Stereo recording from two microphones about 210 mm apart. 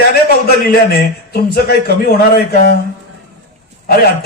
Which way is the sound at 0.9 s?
45° left (ahead or behind).